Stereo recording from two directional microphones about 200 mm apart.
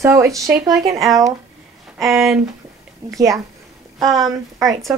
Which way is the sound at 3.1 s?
15° right (ahead or behind).